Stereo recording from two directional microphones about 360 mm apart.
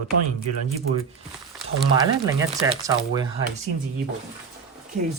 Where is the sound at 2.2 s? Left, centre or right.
Centre.